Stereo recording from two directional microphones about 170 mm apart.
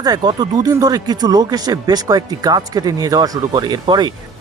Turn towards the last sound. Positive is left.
turn(degrees=-25)  # may be behind; listen again after turning